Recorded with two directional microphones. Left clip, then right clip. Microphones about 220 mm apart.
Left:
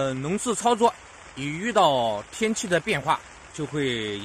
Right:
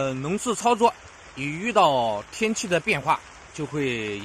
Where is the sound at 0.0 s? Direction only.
5° right (ahead or behind).